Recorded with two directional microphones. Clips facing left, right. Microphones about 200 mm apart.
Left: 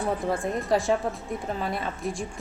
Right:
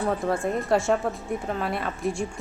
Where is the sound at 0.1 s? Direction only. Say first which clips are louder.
Even; centre (ahead or behind).